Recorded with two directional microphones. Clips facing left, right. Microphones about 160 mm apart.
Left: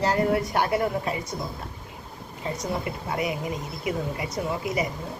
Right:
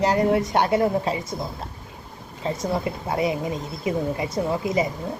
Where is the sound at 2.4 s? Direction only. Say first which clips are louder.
Right 4 dB; 25° right (ahead or behind).